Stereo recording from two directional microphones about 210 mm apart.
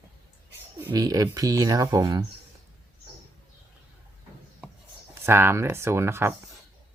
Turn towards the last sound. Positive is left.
turn(degrees=-10)  # may be behind; listen again after turning